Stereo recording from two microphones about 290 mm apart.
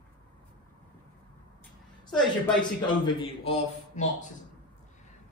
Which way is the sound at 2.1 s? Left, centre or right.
Centre.